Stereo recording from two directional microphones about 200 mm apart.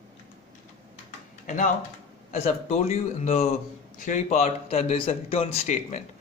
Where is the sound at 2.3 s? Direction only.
30° left (ahead or behind).